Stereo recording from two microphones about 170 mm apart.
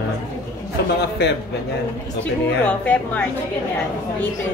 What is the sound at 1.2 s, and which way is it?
Speech, 75° left (ahead or behind).